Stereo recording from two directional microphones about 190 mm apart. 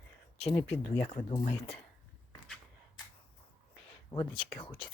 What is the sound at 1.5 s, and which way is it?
Speech, 30° left (ahead or behind).